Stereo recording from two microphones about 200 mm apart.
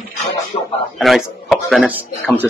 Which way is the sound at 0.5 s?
25° left (ahead or behind).